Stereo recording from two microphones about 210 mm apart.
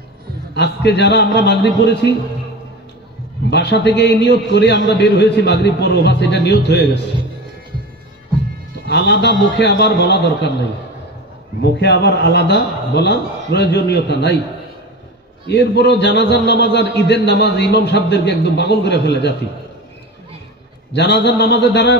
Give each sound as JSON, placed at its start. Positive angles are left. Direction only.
{"t": 0.6, "sound": "a man's voice", "side_deg": 55}
{"t": 3.4, "sound": "a man's voice", "side_deg": 55}
{"t": 8.8, "sound": "a man's voice", "side_deg": 55}
{"t": 11.6, "sound": "a man's voice", "side_deg": 55}
{"t": 15.4, "sound": "a man's voice", "side_deg": 55}
{"t": 20.9, "sound": "a man's voice", "side_deg": 55}